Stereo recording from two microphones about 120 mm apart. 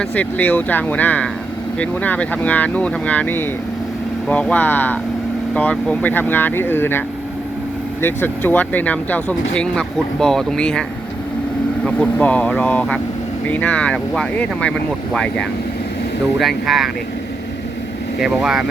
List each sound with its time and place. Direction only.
0.0 s speech: 15° left (ahead or behind)
8.0 s speech: 15° left (ahead or behind)
11.9 s speech: 10° left (ahead or behind)
18.2 s speech: 5° right (ahead or behind)